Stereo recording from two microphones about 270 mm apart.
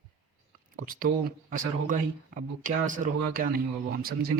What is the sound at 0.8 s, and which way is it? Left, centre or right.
Speech, right.